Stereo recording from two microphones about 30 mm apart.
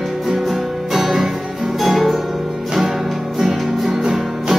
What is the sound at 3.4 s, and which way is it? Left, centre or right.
Music, centre.